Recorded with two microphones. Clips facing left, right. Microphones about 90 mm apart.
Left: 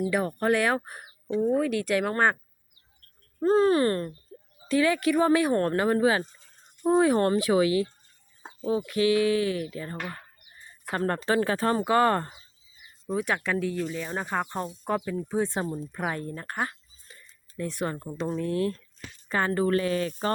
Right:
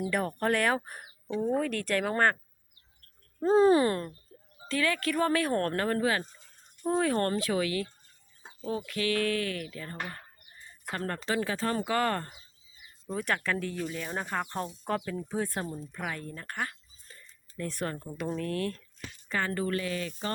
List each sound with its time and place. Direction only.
0.1 s speech: 5° left (ahead or behind)
3.6 s speech: 15° right (ahead or behind)
4.7 s speech: 20° left (ahead or behind)
6.8 s a sound: 20° left (ahead or behind)
8.9 s a sound: 20° left (ahead or behind)
10.9 s a woman's voice: 35° left (ahead or behind)
11.3 s speech: 45° left (ahead or behind)
11.7 s a woman's voice: 30° left (ahead or behind)
13.1 s speech: 10° left (ahead or behind)
15.3 s a sound: 20° left (ahead or behind)
15.9 s a woman's voice: 35° left (ahead or behind)
17.6 s speech: 10° left (ahead or behind)
19.3 s a woman's voice: 30° left (ahead or behind)